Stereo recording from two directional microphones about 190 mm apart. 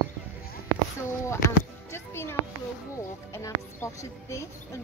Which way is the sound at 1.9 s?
15° left (ahead or behind).